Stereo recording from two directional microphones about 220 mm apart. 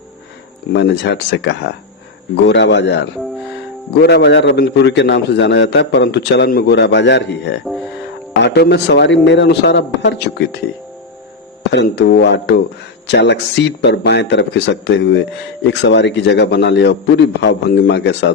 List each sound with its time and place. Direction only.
0.7 s a man's voice: 50° left (ahead or behind)
7.6 s speech: centre (ahead or behind)
8.3 s a man's voice: 50° left (ahead or behind)
11.7 s a man's voice: 50° left (ahead or behind)